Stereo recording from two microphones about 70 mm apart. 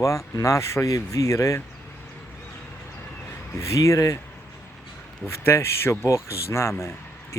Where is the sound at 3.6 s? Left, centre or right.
Left.